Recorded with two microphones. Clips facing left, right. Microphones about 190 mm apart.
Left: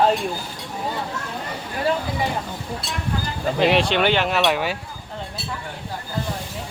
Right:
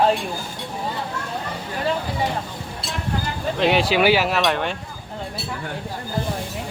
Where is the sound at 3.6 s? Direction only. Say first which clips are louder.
Even; centre (ahead or behind).